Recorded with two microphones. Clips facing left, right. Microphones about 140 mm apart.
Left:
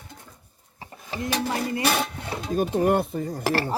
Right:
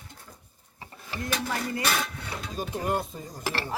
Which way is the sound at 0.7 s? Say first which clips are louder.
Left 4 dB; 30° left (ahead or behind).